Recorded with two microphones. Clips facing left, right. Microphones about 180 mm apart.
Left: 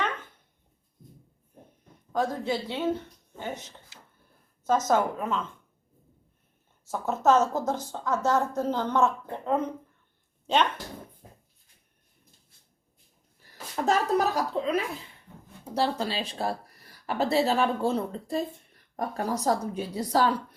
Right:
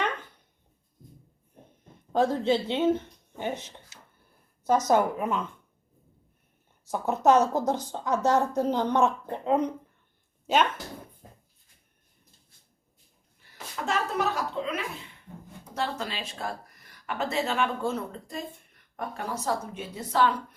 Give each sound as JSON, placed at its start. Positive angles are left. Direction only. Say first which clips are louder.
{"t": 2.1, "sound": "a woman's voice", "louder": "right 4 dB", "side_deg": -25}
{"t": 6.8, "sound": "a woman's voice", "louder": "right 1 dB", "side_deg": -15}
{"t": 10.4, "sound": "speech", "louder": "even", "side_deg": -5}
{"t": 13.8, "sound": "speech", "louder": "left 4 dB", "side_deg": 40}